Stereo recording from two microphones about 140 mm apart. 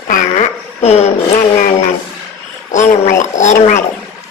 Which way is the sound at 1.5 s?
65° left (ahead or behind).